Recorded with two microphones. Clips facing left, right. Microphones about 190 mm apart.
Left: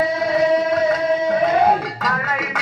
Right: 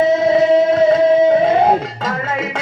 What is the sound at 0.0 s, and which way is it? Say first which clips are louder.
Music: right 5 dB; 25° right (ahead or behind).